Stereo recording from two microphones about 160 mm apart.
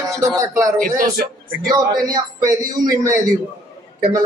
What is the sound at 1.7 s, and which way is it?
Speech, 25° right (ahead or behind).